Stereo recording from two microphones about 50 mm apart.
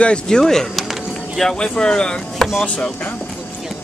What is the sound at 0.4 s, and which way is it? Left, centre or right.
Speech, centre.